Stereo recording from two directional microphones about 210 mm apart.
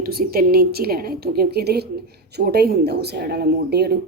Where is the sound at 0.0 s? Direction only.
45° right (ahead or behind).